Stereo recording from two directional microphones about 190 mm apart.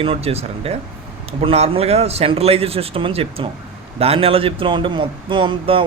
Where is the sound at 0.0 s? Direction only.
30° right (ahead or behind).